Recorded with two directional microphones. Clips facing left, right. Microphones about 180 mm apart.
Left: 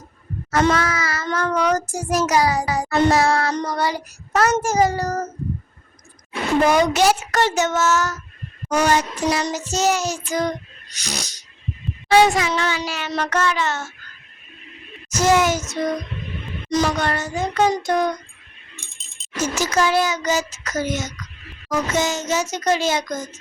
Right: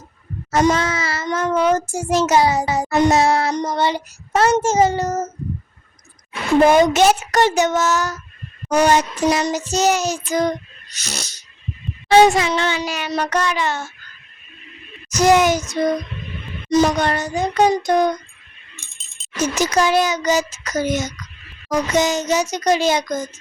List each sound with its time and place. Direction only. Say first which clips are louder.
0.7 s child singing: right 1 dB; 25° right (ahead or behind)
6.7 s a child's voice: right 3 dB; 20° right (ahead or behind)
8.7 s child singing: right 3 dB; 20° right (ahead or behind)
11.0 s speech: left 1 dB; 15° left (ahead or behind)
12.1 s child singing: right 3 dB; 25° right (ahead or behind)
13.1 s a child's voice: right 1 dB; 15° right (ahead or behind)
15.1 s a child's voice: right 3 dB; 15° right (ahead or behind)
19.4 s a child's voice: right 2 dB; 20° right (ahead or behind)